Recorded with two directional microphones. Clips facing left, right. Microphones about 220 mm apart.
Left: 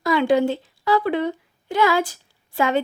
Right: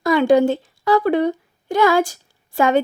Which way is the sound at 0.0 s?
45° right (ahead or behind).